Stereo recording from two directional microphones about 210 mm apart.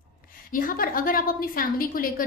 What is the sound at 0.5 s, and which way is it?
A woman's voice, 40° left (ahead or behind).